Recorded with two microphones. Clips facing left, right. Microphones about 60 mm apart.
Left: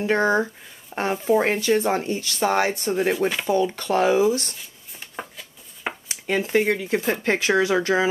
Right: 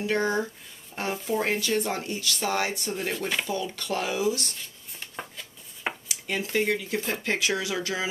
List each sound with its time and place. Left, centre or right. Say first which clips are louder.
0.0 s speech: left 6 dB; left
6.0 s dishes: left 7 dB; left
6.7 s speech: left 6 dB; left